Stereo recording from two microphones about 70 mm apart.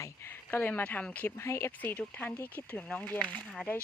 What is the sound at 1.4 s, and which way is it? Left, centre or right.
Speech, left.